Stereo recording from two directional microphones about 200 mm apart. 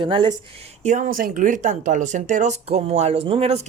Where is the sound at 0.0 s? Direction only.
25° right (ahead or behind).